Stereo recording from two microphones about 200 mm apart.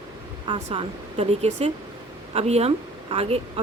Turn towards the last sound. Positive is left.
turn(degrees=-30)  # may be behind; listen again after turning